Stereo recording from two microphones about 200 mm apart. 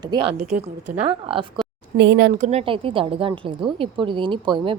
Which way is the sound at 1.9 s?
60° right (ahead or behind).